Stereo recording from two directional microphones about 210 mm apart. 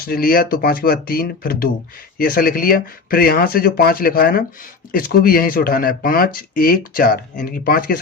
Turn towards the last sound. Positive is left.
turn(degrees=45)  # may be behind; listen again after turning